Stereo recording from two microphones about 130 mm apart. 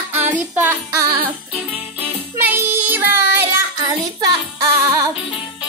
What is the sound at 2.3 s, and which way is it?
Child singing, 20° right (ahead or behind).